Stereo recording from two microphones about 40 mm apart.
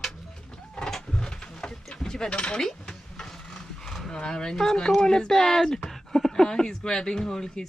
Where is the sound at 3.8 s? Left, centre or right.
Centre.